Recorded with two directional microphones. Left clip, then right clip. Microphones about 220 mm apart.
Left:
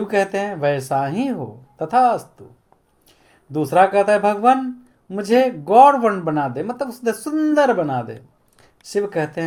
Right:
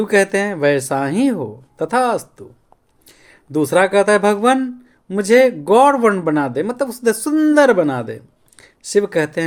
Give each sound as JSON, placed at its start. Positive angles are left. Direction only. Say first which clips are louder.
{"t": 0.1, "sound": "speech", "louder": "right 4 dB", "side_deg": -40}